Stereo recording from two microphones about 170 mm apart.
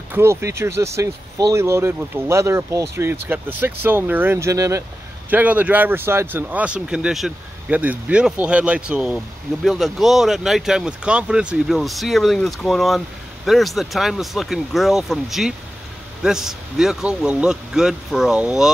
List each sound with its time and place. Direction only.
0.1 s speech: 15° right (ahead or behind)